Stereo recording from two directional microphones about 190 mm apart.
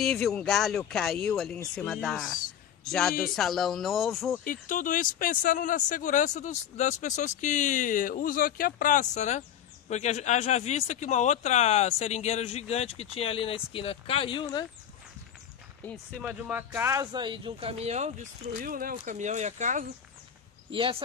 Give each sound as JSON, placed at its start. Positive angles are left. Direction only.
{"t": 0.0, "sound": "speech", "side_deg": 5}
{"t": 4.5, "sound": "speech", "side_deg": 45}
{"t": 15.8, "sound": "speech", "side_deg": 5}
{"t": 16.3, "sound": "speech", "side_deg": -10}
{"t": 20.7, "sound": "speech", "side_deg": -25}